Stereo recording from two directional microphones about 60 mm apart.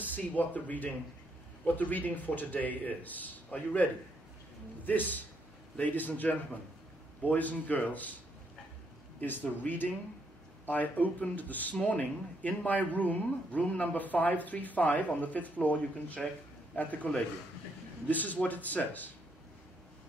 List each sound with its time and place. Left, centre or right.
0.1 s speech: left
9.2 s speech: left
16.2 s speech: centre
16.7 s speech: left